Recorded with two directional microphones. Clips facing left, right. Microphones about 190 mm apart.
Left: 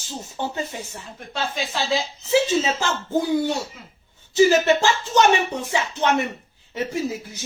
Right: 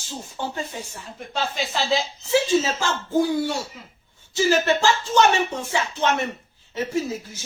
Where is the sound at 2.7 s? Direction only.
20° left (ahead or behind).